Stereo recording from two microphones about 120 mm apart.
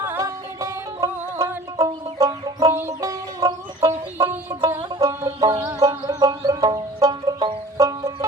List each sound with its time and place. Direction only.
0.0 s music: 20° right (ahead or behind)